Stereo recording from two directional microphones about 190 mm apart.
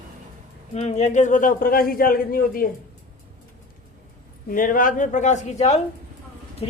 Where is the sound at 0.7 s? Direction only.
35° left (ahead or behind).